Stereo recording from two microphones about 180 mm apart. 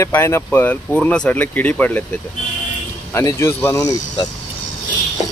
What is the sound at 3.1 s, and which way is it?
Speech, 15° left (ahead or behind).